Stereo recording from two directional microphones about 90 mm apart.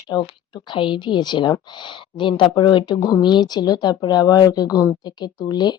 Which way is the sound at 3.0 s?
35° left (ahead or behind).